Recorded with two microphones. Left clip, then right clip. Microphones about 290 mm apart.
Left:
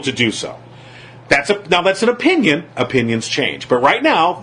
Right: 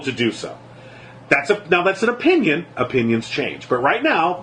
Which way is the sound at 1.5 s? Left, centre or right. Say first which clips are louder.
Left 3 dB; left.